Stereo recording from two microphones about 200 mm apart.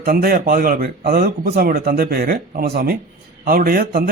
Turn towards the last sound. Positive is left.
turn(degrees=-50)  # may be behind; listen again after turning